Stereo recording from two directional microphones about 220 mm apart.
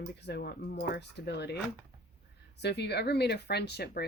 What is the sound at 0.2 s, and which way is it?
Speech, 50° left (ahead or behind).